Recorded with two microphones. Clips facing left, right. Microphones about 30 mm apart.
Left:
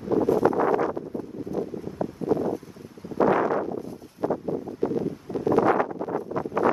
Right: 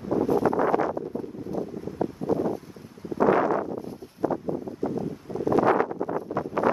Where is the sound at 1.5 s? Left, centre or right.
Left.